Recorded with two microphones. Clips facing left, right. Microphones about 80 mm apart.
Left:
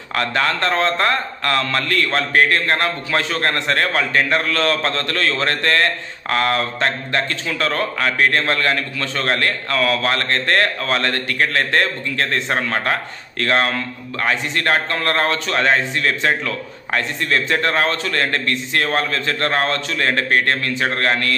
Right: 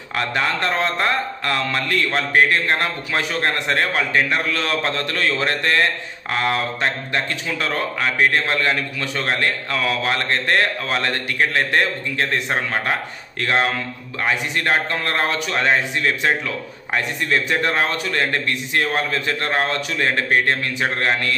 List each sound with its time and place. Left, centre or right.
0.1 s a man's voice: centre